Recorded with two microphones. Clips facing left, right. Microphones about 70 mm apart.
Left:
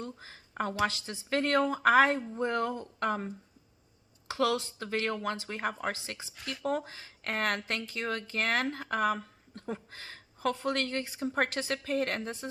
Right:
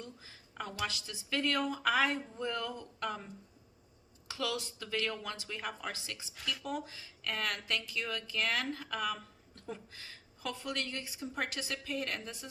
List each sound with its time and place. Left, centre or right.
0.0 s speech: left